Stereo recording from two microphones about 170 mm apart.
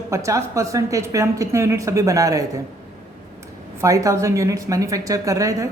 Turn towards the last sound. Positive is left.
turn(degrees=-20)  # may be behind; listen again after turning